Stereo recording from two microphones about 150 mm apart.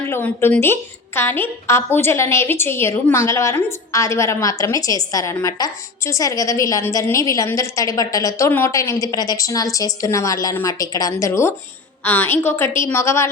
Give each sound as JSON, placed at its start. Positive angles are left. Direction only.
{"t": 0.0, "sound": "a woman's voice", "side_deg": 15}